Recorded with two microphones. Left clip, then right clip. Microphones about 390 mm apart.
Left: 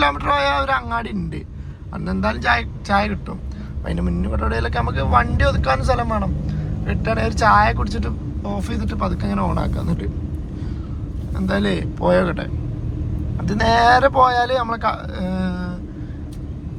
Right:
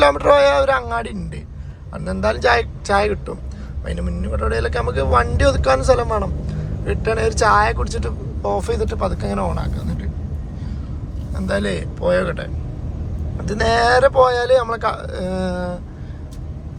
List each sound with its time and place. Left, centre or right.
0.0 s a man's voice: centre
11.3 s a man's voice: centre